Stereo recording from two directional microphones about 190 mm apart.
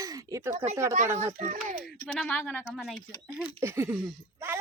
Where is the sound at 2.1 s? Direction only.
5° left (ahead or behind).